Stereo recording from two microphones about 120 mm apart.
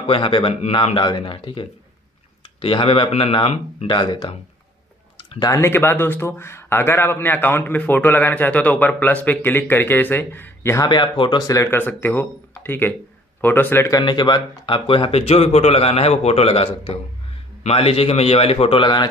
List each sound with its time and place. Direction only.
0.0 s speech: 45° left (ahead or behind)
5.4 s a man's voice: 25° left (ahead or behind)
10.9 s a man's voice: 40° left (ahead or behind); by 13.9 s 20° left (ahead or behind)
13.9 s speech: 40° left (ahead or behind)